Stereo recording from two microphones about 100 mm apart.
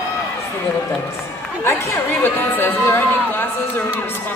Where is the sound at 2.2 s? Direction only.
20° left (ahead or behind).